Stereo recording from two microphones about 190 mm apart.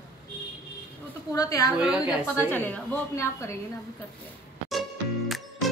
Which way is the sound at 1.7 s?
5° right (ahead or behind).